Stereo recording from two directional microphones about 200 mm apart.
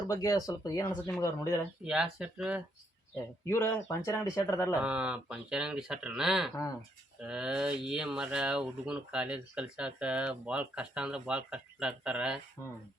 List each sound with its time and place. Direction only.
0.1 s speech: 20° left (ahead or behind)
1.8 s speech: 5° right (ahead or behind)
3.4 s speech: 10° left (ahead or behind)
4.8 s speech: 5° right (ahead or behind)